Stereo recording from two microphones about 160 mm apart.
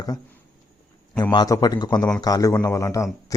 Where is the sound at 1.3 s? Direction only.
25° left (ahead or behind).